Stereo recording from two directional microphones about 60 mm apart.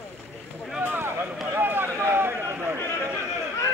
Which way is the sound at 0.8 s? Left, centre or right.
Right.